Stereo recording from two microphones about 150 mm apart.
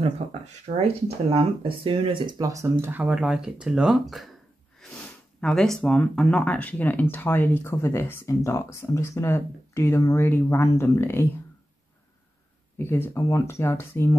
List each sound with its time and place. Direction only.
0.3 s speech: 45° right (ahead or behind); by 2.7 s 20° right (ahead or behind)
2.8 s speech: 10° right (ahead or behind); by 11.2 s 15° left (ahead or behind)
12.7 s speech: 15° left (ahead or behind)